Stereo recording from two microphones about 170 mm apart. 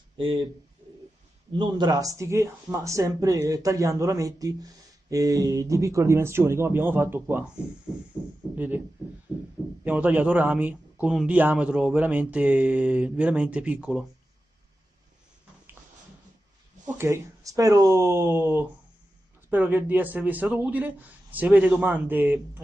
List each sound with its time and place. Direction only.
0.2 s speech: 30° right (ahead or behind)
1.5 s a man's voice: 25° right (ahead or behind)
8.5 s a man's voice: 10° right (ahead or behind)
9.8 s a man's voice: 10° right (ahead or behind)
17.0 s a man's voice: 20° right (ahead or behind)